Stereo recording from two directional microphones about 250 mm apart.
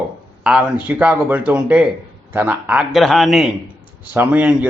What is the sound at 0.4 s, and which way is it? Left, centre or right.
A man's voice, centre.